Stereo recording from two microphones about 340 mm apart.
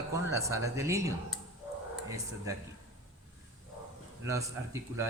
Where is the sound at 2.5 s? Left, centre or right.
Centre.